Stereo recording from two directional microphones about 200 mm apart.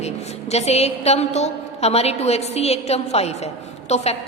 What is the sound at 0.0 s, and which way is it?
A woman's voice, 35° left (ahead or behind).